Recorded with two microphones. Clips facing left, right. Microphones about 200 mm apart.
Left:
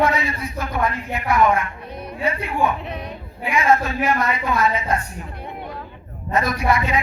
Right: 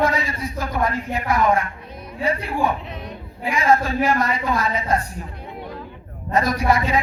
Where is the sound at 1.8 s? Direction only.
65° left (ahead or behind).